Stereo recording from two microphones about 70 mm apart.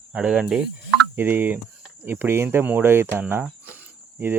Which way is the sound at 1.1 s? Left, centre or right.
Right.